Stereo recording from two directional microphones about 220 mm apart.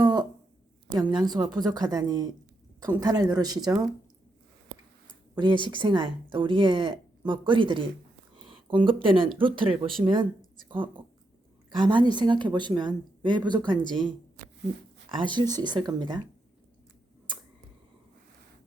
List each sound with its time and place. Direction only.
0.0 s a sound: 15° right (ahead or behind)
0.9 s speech: 20° right (ahead or behind)
5.3 s speech: 20° right (ahead or behind)
15.2 s speech: 20° right (ahead or behind)